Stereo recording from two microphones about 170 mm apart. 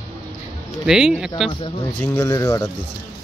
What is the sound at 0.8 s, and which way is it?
Speech, 5° right (ahead or behind).